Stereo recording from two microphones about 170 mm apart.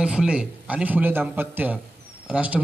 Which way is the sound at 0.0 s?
5° right (ahead or behind).